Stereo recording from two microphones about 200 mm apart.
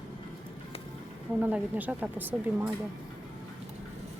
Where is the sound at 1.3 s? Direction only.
5° right (ahead or behind).